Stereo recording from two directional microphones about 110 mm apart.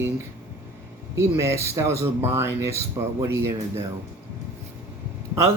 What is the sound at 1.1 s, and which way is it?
Speech, 25° right (ahead or behind).